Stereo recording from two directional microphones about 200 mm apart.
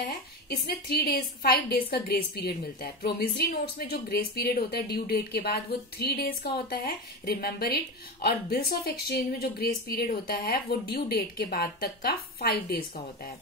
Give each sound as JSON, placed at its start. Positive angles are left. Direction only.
{"t": 0.0, "sound": "speech", "side_deg": 50}